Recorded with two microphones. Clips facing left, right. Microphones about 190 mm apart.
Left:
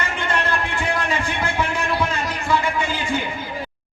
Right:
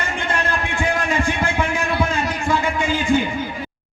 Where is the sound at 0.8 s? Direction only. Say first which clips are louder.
Right 3 dB; 50° right (ahead or behind).